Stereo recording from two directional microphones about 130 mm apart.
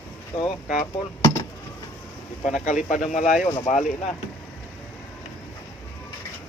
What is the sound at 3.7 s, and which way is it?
Speech, 70° left (ahead or behind).